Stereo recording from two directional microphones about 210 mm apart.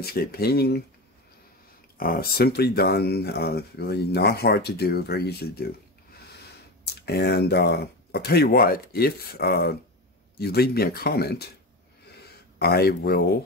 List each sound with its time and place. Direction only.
0.0 s speech: 45° left (ahead or behind)
2.0 s speech: 45° left (ahead or behind)
6.8 s speech: 50° left (ahead or behind)
12.2 s a sound: 50° left (ahead or behind)